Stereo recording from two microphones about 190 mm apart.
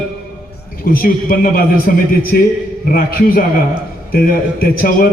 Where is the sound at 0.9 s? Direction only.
50° left (ahead or behind).